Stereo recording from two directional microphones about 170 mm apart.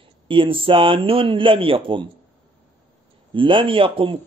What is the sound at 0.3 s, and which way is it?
Speech, 30° right (ahead or behind).